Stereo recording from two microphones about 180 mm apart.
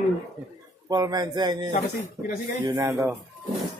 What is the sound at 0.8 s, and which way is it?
Speech, 20° right (ahead or behind).